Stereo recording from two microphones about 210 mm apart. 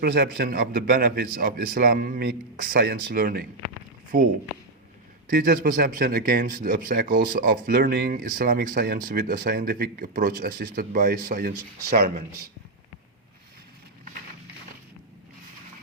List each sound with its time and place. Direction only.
0.0 s a man's voice: 45° right (ahead or behind)
5.3 s a man's voice: 40° right (ahead or behind)